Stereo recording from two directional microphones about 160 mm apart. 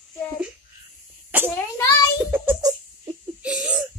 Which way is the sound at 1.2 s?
15° right (ahead or behind).